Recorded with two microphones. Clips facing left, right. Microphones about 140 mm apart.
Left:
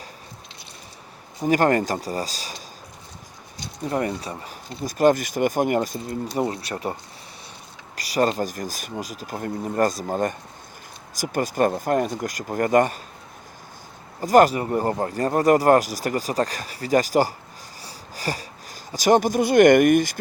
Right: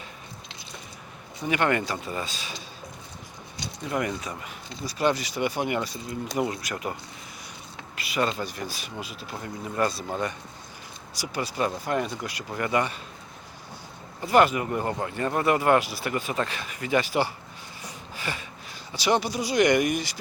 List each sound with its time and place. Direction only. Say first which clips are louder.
1.4 s speech: left 6 dB; 40° left (ahead or behind)
3.8 s speech: left 4 dB; 35° left (ahead or behind)
4.8 s speech: left 7 dB; 45° left (ahead or behind)
6.3 s speech: left 2 dB; 35° left (ahead or behind)
7.9 s speech: left 6 dB; 40° left (ahead or behind)
14.2 s speech: left 5 dB; 40° left (ahead or behind)